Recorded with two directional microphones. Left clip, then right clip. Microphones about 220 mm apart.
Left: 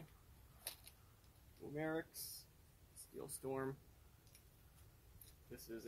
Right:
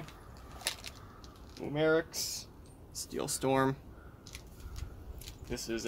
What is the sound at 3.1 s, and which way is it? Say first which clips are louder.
Speech: right 16 dB; 25° right (ahead or behind).